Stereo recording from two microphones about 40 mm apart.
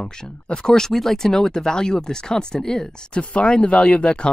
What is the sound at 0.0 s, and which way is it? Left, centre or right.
Speech, centre.